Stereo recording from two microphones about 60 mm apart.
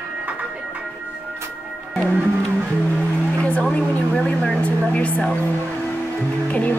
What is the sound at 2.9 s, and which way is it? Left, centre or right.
Vehicle, centre.